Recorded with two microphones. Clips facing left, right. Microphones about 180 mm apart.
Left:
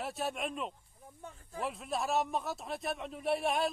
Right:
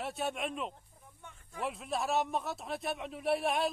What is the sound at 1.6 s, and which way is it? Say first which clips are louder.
A man's voice: even; centre (ahead or behind).